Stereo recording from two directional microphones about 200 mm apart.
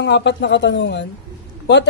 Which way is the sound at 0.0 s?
60° left (ahead or behind).